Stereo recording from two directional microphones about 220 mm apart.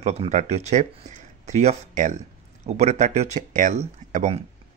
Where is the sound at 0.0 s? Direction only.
30° right (ahead or behind).